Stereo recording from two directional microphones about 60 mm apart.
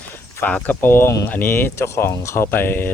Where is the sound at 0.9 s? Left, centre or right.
Left.